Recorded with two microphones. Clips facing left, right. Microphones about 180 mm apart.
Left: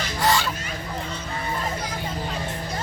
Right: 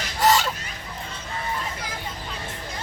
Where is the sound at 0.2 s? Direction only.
45° right (ahead or behind).